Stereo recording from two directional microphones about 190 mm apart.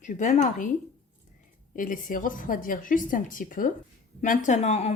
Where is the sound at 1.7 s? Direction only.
45° left (ahead or behind).